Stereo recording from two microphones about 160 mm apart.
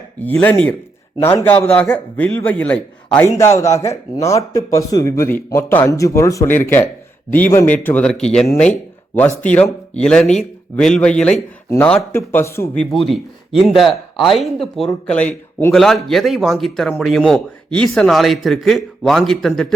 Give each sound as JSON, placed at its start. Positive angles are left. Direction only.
{"t": 0.2, "sound": "a man's voice", "side_deg": 10}
{"t": 12.8, "sound": "a man's voice", "side_deg": 0}